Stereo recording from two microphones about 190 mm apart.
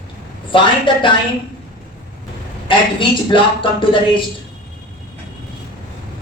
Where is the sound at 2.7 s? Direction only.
25° left (ahead or behind).